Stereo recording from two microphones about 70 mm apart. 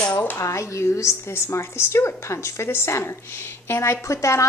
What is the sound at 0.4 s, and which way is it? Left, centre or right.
A woman's voice, left.